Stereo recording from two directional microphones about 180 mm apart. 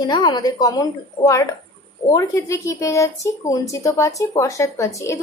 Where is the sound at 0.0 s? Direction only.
25° left (ahead or behind).